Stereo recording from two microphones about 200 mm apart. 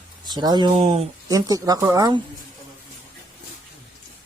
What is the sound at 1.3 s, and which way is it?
Speech, 20° right (ahead or behind).